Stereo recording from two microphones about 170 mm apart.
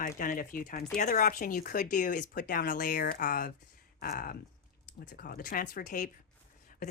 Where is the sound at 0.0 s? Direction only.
50° left (ahead or behind).